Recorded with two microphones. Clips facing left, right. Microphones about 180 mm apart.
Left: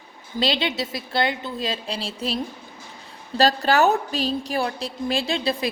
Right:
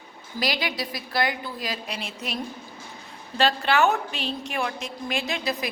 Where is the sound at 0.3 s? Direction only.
25° left (ahead or behind).